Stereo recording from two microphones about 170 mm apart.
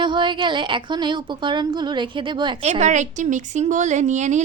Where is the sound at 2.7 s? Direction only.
45° right (ahead or behind).